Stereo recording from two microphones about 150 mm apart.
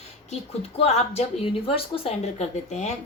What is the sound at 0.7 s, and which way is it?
A woman's voice, 45° left (ahead or behind).